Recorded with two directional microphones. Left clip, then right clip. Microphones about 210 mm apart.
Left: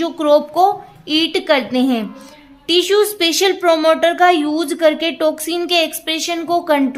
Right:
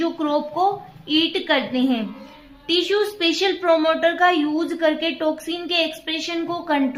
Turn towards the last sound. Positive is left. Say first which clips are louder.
# left 7 dB
turn(degrees=45)  # may be behind; listen again after turning